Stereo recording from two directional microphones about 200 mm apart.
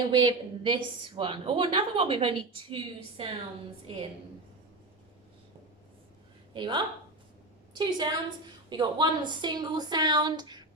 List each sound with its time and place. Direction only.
0.1 s a woman's voice: 25° right (ahead or behind)
6.5 s a woman's voice: 20° right (ahead or behind)